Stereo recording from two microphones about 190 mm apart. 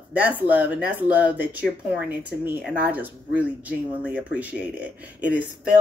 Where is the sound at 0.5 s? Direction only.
10° right (ahead or behind).